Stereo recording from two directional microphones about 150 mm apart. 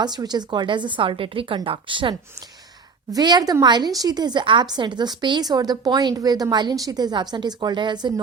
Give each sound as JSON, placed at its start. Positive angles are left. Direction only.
{"t": 0.0, "sound": "a woman's voice", "side_deg": -30}